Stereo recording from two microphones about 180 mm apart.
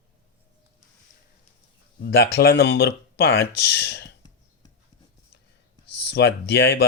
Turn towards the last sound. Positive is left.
turn(degrees=75)  # may be behind; listen again after turning